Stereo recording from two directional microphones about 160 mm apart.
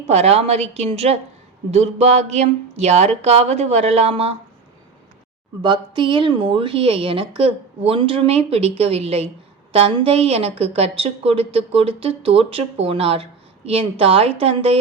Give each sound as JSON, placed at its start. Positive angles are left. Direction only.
{"t": 0.1, "sound": "speech", "side_deg": -40}
{"t": 5.6, "sound": "speech", "side_deg": -30}